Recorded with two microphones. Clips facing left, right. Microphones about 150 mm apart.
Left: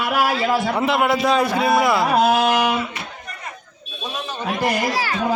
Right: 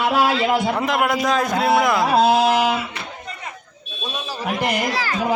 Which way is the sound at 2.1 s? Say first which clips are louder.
Right 3 dB; 30° right (ahead or behind).